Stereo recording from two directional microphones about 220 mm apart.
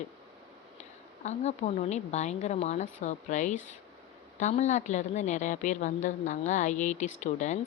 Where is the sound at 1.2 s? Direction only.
30° left (ahead or behind).